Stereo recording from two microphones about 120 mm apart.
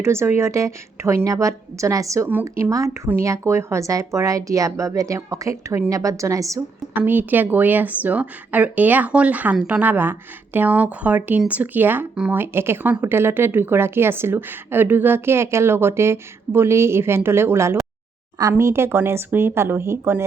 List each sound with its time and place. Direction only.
0.0 s a woman's voice: 20° right (ahead or behind)
7.0 s speech: 15° right (ahead or behind)
12.4 s a woman's voice: 20° right (ahead or behind)